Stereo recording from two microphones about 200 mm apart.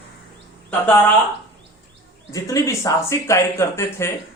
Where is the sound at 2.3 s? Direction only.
15° left (ahead or behind).